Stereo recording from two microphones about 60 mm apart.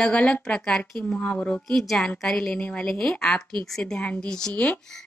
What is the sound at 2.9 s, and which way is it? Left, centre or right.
A woman's voice, centre.